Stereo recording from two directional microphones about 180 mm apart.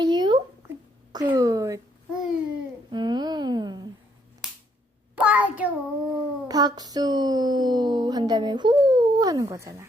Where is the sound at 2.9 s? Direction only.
25° right (ahead or behind).